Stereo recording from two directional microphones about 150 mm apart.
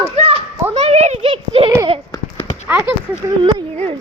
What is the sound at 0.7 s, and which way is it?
A child's voice, 45° right (ahead or behind).